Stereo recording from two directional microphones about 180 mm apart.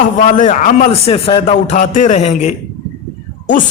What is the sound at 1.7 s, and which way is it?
Speech, 45° left (ahead or behind).